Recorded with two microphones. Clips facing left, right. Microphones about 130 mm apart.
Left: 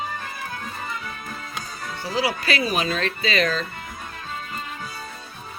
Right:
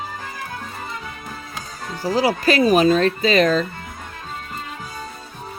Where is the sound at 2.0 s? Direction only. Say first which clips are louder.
Right 6 dB; 40° right (ahead or behind).